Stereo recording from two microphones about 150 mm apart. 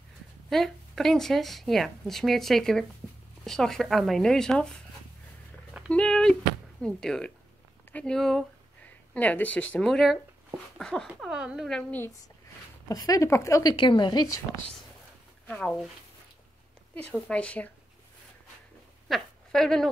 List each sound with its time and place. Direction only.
0.5 s a woman's voice: centre (ahead or behind)
5.9 s a woman's voice: 5° left (ahead or behind)
12.8 s speech: 25° left (ahead or behind)
15.4 s speech: 10° left (ahead or behind)
17.3 s speech: 10° left (ahead or behind)
19.0 s speech: 5° left (ahead or behind)